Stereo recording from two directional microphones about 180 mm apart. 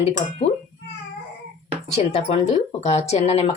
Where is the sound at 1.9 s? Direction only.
35° left (ahead or behind).